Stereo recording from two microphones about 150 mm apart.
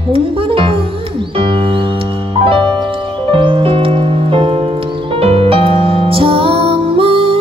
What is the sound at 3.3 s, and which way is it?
Music, 35° right (ahead or behind).